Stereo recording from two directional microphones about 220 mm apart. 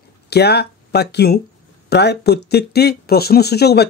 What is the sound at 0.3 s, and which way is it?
A man's voice, 50° left (ahead or behind).